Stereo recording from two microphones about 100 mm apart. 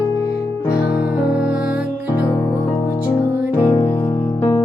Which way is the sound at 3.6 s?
35° left (ahead or behind).